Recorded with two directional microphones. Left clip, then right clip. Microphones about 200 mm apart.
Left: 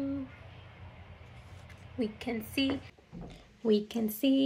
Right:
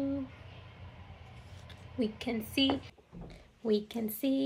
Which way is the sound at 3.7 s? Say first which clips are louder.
Left 3 dB; 45° right (ahead or behind).